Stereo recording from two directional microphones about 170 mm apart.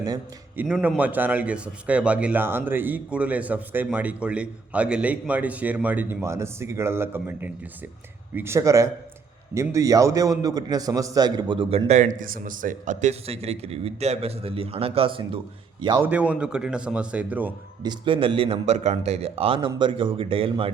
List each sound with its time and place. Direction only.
0.5 s a man's voice: 10° right (ahead or behind); by 15.4 s 30° right (ahead or behind)
16.0 s a man's voice: 10° right (ahead or behind)
17.8 s a man's voice: 30° right (ahead or behind)